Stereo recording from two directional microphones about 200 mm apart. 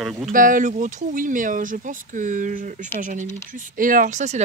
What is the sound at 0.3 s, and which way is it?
Speech, 40° right (ahead or behind).